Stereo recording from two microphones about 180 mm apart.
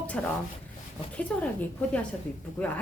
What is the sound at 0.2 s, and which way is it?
Speech, 5° left (ahead or behind).